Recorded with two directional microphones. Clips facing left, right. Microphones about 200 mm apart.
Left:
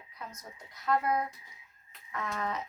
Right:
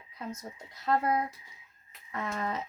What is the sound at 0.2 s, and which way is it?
Speech, 30° right (ahead or behind).